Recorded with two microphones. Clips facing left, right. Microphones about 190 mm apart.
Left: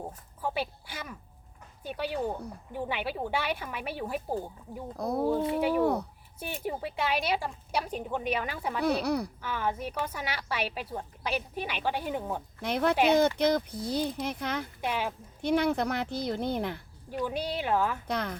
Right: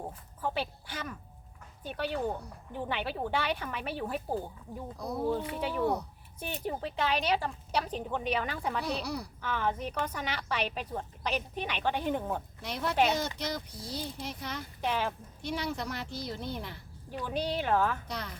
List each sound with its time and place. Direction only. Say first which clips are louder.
0.4 s speech: left 1 dB; 10° left (ahead or behind)
4.9 s speech: left 4 dB; 55° left (ahead or behind)
5.5 s speech: left 5 dB; 10° left (ahead or behind)
8.8 s speech: left 7 dB; 60° left (ahead or behind)
9.4 s speech: even; 10° left (ahead or behind)
12.6 s speech: left 4 dB; 55° left (ahead or behind)
14.8 s speech: right 3 dB; 10° left (ahead or behind)
15.4 s speech: left 10 dB; 55° left (ahead or behind)
17.1 s speech: left 2 dB; 10° left (ahead or behind)
18.1 s speech: left 7 dB; 55° left (ahead or behind)